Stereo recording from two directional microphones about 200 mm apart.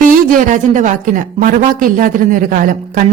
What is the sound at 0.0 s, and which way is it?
A woman's voice, 45° right (ahead or behind).